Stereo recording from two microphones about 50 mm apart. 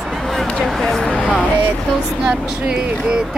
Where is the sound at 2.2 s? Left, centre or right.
Centre.